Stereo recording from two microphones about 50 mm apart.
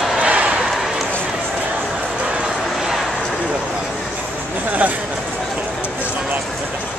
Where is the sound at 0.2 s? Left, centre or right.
Right.